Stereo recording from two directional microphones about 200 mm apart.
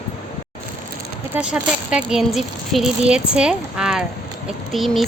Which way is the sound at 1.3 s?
5° right (ahead or behind).